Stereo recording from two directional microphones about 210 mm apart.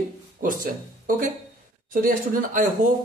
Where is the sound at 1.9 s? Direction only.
40° right (ahead or behind).